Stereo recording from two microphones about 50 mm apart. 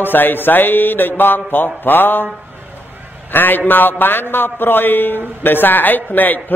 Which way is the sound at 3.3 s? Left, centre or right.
Left.